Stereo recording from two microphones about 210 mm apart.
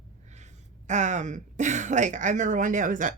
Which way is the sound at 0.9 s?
35° right (ahead or behind).